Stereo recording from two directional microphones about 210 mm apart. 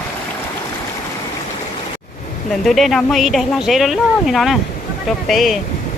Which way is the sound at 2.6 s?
Centre (ahead or behind).